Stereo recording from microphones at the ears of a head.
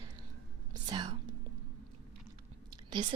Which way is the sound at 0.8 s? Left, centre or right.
Right.